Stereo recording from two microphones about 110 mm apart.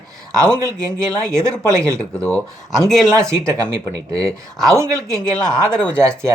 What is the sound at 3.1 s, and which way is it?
Speech, 25° right (ahead or behind).